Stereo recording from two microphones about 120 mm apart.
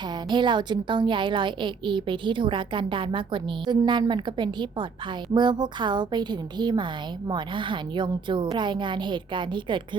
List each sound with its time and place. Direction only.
0.3 s a woman's voice: 40° right (ahead or behind)